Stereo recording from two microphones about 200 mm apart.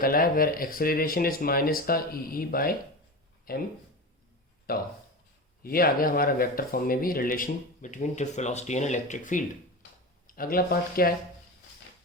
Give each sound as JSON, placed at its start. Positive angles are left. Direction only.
{"t": 0.0, "sound": "speech", "side_deg": 45}
{"t": 4.7, "sound": "speech", "side_deg": 50}